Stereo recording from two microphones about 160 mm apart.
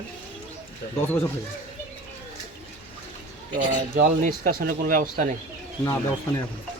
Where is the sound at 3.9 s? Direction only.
65° right (ahead or behind).